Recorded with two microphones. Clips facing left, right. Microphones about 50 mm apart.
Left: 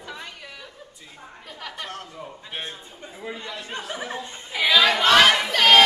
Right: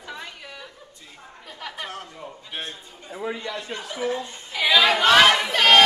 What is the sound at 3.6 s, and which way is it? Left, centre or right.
Speech, left.